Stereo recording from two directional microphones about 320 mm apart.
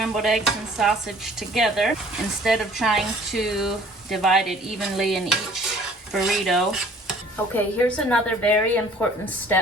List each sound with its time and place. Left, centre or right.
0.0 s a woman's voice: centre